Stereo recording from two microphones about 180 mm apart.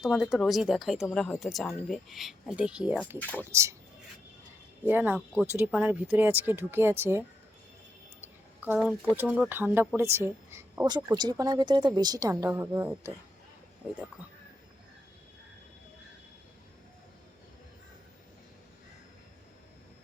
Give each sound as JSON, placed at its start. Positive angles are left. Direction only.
{"t": 0.0, "sound": "speech", "side_deg": 0}
{"t": 3.2, "sound": "speech", "side_deg": 10}
{"t": 3.5, "sound": "speech", "side_deg": -15}
{"t": 4.9, "sound": "speech", "side_deg": -10}
{"t": 8.2, "sound": "a sound", "side_deg": -10}
{"t": 8.8, "sound": "speech", "side_deg": -5}